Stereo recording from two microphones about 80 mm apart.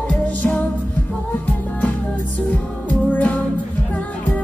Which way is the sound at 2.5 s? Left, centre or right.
Left.